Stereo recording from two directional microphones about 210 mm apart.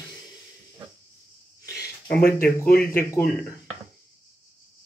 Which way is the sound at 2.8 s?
10° left (ahead or behind).